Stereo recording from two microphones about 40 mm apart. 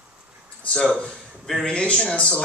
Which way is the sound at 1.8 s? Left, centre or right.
Left.